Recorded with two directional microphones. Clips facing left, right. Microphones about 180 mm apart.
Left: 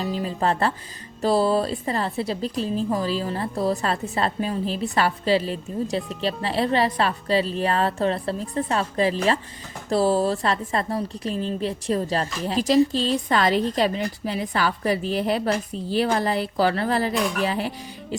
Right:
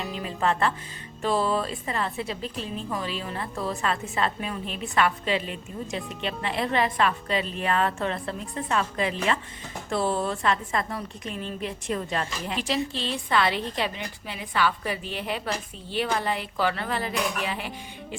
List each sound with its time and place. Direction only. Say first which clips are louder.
0.0 s a woman's voice: left 4 dB; 30° left (ahead or behind)